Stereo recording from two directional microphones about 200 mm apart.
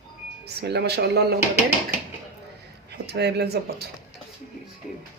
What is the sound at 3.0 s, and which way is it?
Speech, 55° right (ahead or behind).